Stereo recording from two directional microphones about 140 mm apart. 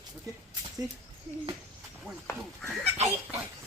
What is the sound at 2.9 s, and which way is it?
Pig, 50° right (ahead or behind).